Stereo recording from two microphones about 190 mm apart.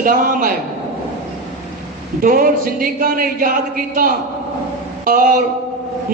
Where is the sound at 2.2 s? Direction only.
50° right (ahead or behind).